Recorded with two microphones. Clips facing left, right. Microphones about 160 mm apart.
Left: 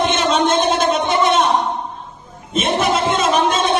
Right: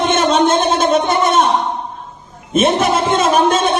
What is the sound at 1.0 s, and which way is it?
Gargling, 55° right (ahead or behind).